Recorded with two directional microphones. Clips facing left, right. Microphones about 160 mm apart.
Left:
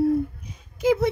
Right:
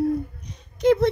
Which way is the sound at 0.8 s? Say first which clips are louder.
Right 3 dB; 5° left (ahead or behind).